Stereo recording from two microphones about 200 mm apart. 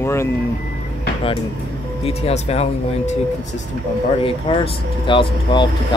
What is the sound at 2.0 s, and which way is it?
Speech, 30° left (ahead or behind).